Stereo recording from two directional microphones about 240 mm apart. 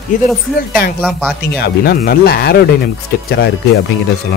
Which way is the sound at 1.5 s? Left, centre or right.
Left.